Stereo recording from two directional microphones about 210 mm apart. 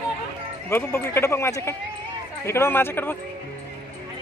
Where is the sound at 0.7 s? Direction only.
10° left (ahead or behind).